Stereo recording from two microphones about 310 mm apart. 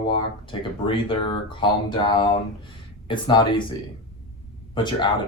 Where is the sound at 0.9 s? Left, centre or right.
Centre.